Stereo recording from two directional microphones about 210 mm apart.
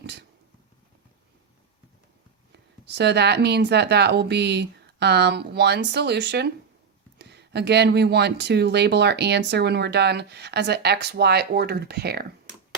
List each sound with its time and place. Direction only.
0.0 s cat: 50° right (ahead or behind)
2.5 s speech: 55° right (ahead or behind)